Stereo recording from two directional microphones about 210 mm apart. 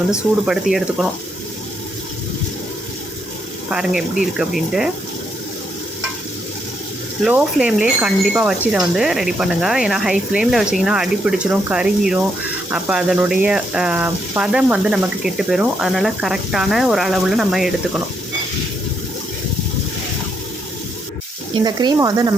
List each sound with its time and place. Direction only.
0.4 s speech: centre (ahead or behind)
3.7 s speech: 5° right (ahead or behind)
7.3 s speech: 5° right (ahead or behind)
21.6 s speech: 20° right (ahead or behind)